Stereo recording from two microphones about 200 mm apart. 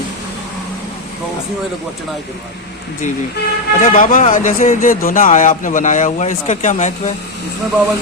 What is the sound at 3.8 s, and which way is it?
Speech, 40° left (ahead or behind).